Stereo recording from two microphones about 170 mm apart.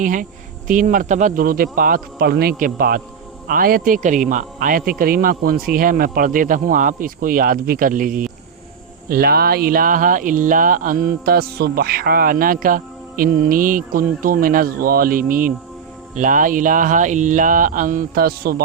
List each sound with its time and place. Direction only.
0.0 s speech: 50° right (ahead or behind)